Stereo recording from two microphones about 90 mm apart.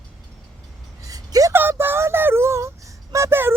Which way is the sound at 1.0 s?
40° right (ahead or behind).